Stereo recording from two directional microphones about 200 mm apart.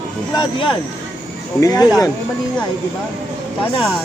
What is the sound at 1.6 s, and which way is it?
Speech, 15° left (ahead or behind).